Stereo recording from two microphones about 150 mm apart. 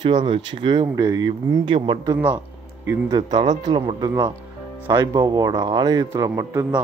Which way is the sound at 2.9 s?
20° right (ahead or behind).